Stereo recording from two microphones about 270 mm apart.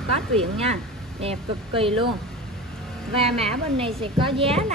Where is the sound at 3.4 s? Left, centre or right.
Centre.